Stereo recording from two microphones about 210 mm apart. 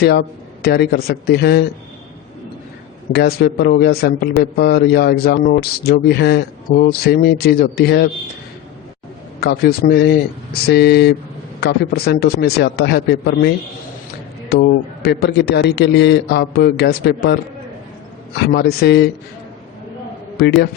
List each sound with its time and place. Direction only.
0.0 s a man's voice: 50° left (ahead or behind)
3.1 s a man's voice: 50° left (ahead or behind)
9.4 s a man's voice: 50° left (ahead or behind)
14.5 s a man's voice: 55° left (ahead or behind)
18.3 s a man's voice: 50° left (ahead or behind)
20.4 s a man's voice: 50° left (ahead or behind)